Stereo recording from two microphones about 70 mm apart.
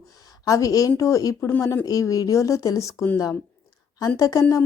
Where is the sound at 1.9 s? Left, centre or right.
Left.